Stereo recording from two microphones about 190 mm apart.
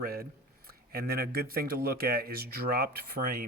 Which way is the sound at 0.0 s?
50° right (ahead or behind).